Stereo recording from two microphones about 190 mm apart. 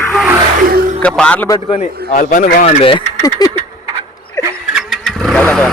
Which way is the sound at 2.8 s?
25° left (ahead or behind).